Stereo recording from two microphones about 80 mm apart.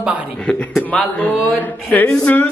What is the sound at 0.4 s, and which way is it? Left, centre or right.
Speech, centre.